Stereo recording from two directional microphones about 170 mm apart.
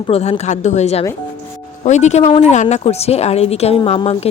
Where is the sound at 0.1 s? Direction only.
40° left (ahead or behind).